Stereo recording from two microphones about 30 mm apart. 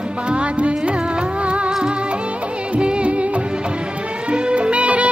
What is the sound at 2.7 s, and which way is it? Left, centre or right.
Music of bollywood, right.